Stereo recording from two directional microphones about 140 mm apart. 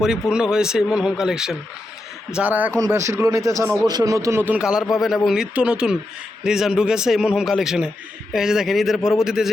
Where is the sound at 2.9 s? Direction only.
20° right (ahead or behind).